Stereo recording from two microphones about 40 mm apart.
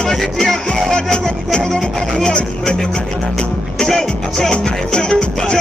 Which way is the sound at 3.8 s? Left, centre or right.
Centre.